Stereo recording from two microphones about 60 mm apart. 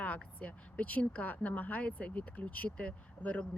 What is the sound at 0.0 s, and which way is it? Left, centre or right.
Speech, left.